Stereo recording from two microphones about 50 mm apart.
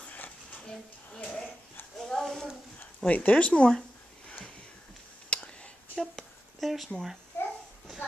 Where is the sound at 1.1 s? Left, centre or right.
Left.